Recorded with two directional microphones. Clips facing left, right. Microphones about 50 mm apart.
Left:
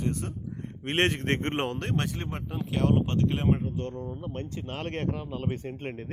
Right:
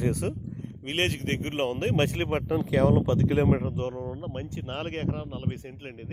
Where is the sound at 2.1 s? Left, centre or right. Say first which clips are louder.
Right 9 dB; right.